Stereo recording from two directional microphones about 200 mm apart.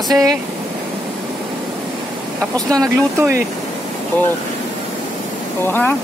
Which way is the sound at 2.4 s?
15° right (ahead or behind).